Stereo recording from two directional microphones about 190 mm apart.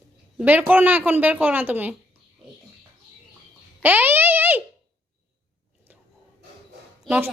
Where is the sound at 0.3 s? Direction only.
10° right (ahead or behind).